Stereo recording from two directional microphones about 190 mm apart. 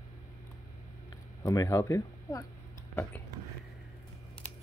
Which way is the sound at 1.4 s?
15° left (ahead or behind).